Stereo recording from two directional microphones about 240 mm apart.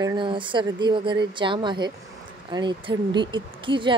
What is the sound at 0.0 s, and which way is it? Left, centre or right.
Speech, centre.